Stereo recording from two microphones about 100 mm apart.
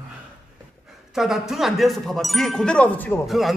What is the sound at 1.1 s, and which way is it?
Speech, 5° right (ahead or behind).